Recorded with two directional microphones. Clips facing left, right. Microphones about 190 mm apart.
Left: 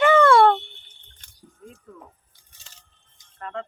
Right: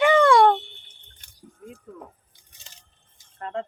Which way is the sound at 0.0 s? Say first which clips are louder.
Left 1 dB; 15° right (ahead or behind).